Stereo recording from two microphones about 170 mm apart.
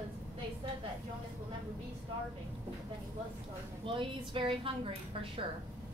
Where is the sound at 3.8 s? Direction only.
30° right (ahead or behind).